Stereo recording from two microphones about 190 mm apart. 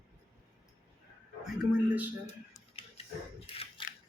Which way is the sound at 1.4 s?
5° right (ahead or behind).